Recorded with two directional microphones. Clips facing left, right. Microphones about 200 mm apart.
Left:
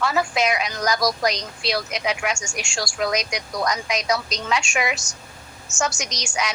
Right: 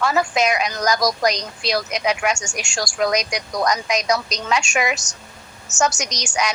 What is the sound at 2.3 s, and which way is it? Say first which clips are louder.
Speech: right 2 dB; 70° right (ahead or behind).